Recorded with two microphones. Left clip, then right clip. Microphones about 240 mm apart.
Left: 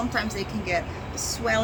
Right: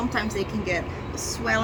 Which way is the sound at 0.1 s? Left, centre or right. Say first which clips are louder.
Right 1 dB; centre.